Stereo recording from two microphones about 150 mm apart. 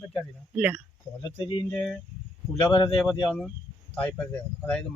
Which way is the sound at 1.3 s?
35° left (ahead or behind).